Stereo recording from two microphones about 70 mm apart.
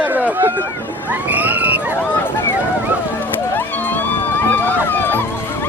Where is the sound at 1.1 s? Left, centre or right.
Right.